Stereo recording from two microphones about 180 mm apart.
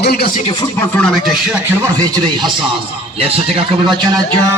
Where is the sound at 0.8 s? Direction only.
10° left (ahead or behind).